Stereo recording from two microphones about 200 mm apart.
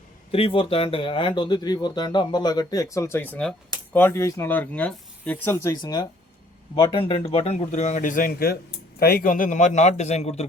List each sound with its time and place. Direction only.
0.3 s a man's voice: 30° left (ahead or behind)